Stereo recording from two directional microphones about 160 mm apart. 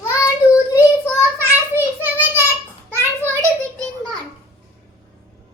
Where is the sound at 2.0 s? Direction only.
10° right (ahead or behind).